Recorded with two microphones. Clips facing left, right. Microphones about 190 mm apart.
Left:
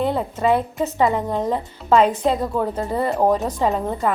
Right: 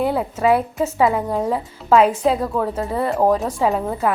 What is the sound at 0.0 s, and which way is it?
Speech, 5° right (ahead or behind).